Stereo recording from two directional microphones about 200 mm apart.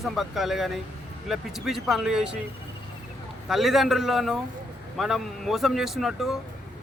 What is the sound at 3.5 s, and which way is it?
A man's voice, centre (ahead or behind).